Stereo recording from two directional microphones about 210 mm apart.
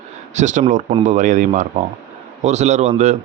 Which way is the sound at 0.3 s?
35° right (ahead or behind).